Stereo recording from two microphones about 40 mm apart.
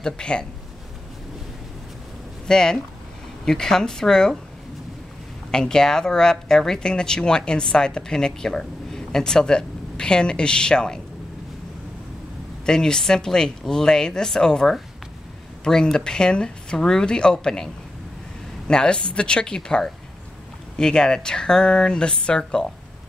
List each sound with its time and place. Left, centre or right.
0.0 s speech: left
2.4 s speech: centre
5.5 s speech: centre
12.6 s speech: centre
18.7 s speech: left